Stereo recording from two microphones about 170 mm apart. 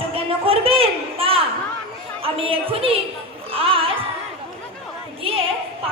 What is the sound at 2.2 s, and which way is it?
Speech, 35° right (ahead or behind).